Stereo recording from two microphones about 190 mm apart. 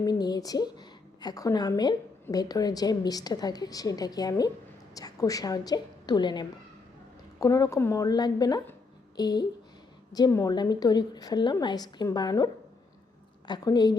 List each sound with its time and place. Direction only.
0.0 s a woman's voice: 20° left (ahead or behind)
13.5 s a woman's voice: 20° left (ahead or behind)